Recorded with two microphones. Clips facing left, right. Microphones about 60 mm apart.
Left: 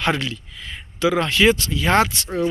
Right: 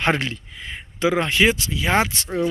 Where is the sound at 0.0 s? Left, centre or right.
Right; by 2.0 s centre.